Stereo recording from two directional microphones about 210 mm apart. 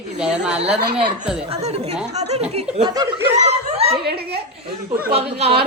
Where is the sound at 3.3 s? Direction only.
30° right (ahead or behind).